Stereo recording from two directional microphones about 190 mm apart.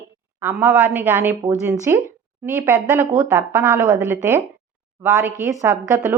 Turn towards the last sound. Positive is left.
turn(degrees=-15)  # may be behind; listen again after turning